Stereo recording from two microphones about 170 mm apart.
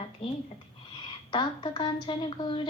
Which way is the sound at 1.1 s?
30° left (ahead or behind).